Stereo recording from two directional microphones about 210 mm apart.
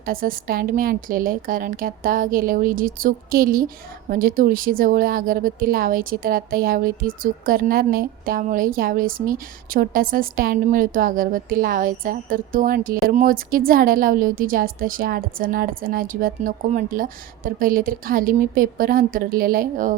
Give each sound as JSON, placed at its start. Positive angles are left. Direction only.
{"t": 0.0, "sound": "a woman's voice", "side_deg": -45}